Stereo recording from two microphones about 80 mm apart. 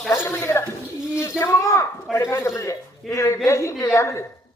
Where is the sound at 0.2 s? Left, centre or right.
Left.